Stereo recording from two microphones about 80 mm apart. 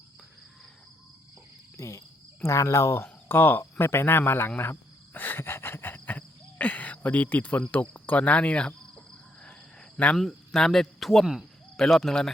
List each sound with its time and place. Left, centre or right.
1.7 s cricket: left; by 9.6 s centre
10.2 s speech: centre